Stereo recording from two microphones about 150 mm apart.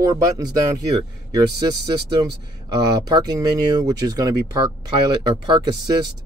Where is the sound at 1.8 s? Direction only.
25° right (ahead or behind).